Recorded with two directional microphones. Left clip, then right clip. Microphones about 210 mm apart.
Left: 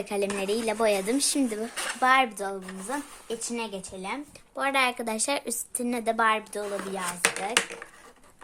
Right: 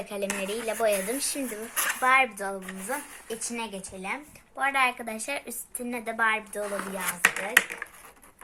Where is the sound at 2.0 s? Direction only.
60° left (ahead or behind).